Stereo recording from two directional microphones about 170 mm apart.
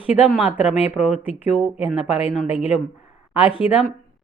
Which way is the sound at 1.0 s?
40° left (ahead or behind).